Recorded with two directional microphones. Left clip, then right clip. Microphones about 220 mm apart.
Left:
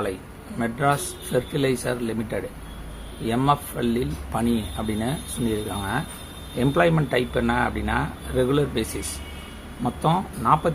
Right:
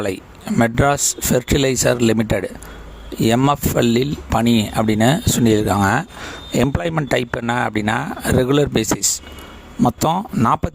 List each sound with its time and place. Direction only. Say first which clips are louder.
0.6 s speech: right 7 dB; 50° right (ahead or behind)